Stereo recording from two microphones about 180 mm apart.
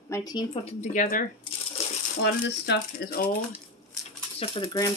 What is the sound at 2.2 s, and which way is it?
Speech, 65° left (ahead or behind).